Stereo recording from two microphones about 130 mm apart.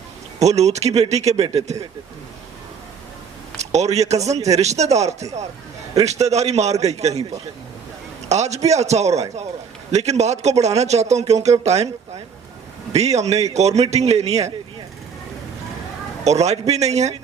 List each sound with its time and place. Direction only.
0.3 s speech: 55° right (ahead or behind)
3.6 s speech: 60° right (ahead or behind)
8.3 s speech: 60° right (ahead or behind)
16.2 s speech: 55° right (ahead or behind)